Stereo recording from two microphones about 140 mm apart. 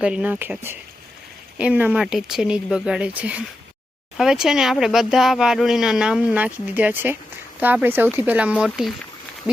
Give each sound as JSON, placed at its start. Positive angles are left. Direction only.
{"t": 0.0, "sound": "speech", "side_deg": -10}